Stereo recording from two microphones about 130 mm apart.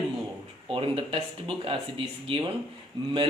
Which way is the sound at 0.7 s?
45° right (ahead or behind).